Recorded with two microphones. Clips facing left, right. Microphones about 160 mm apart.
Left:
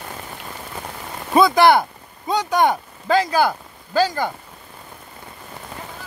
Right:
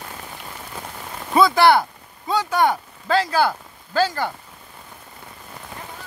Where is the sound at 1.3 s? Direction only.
20° left (ahead or behind).